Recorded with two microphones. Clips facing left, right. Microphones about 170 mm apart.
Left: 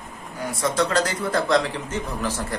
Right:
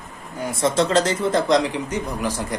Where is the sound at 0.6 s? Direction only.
25° right (ahead or behind).